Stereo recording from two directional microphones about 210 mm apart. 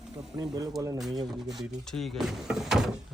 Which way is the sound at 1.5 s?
Centre (ahead or behind).